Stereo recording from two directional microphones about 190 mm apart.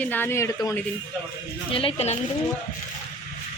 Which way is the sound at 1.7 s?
30° left (ahead or behind).